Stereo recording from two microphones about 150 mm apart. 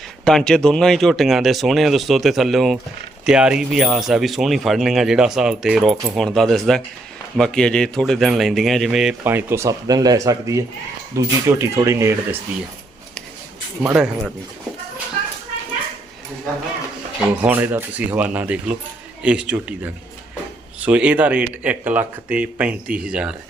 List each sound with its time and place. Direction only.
0.3 s speech: 5° left (ahead or behind); by 12.4 s 20° right (ahead or behind)
13.9 s speech: 5° right (ahead or behind)
17.2 s speech: 10° right (ahead or behind)